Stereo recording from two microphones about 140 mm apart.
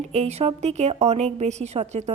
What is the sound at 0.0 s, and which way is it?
A woman's voice, 55° right (ahead or behind).